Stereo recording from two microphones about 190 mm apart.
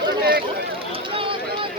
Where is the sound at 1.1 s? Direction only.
30° right (ahead or behind).